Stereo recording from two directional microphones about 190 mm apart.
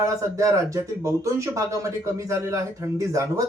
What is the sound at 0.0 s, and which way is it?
Speech, 15° right (ahead or behind).